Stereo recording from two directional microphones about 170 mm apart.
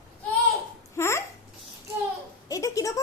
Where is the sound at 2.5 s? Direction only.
20° left (ahead or behind).